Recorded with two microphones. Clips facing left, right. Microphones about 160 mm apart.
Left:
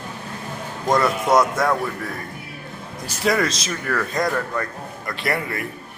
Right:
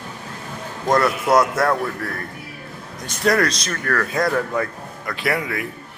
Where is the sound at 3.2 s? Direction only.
Centre (ahead or behind).